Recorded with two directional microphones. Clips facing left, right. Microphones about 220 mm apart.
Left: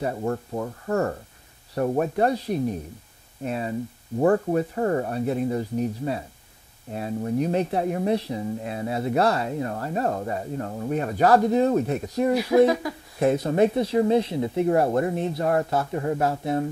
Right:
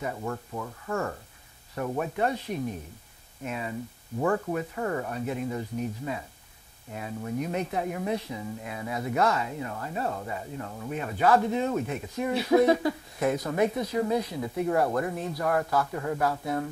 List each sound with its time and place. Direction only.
0.0 s speech: 40° left (ahead or behind)
13.2 s speech: 30° left (ahead or behind)